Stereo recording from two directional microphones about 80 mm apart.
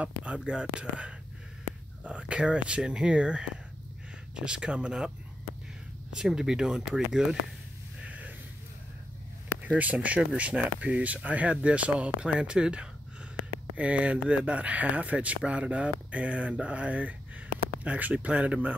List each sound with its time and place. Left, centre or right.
0.0 s speech: centre
4.5 s speech: centre
6.1 s speech: centre
8.0 s a sound: centre
9.8 s speech: centre